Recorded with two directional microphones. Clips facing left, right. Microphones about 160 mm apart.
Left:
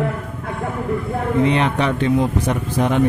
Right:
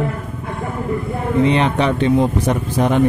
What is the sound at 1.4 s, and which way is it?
Speech, 25° right (ahead or behind).